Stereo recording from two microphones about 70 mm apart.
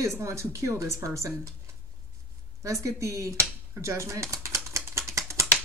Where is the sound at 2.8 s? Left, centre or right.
Right.